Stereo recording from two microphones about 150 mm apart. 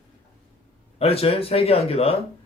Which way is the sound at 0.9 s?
40° left (ahead or behind).